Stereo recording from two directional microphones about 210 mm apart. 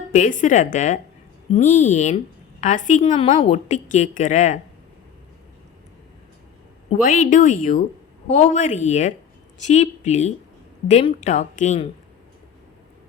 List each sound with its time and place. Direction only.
0.1 s a woman's voice: 40° left (ahead or behind)
7.0 s a woman's voice: 40° left (ahead or behind)